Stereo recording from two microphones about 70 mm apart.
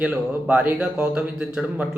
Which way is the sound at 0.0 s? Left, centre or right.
Centre.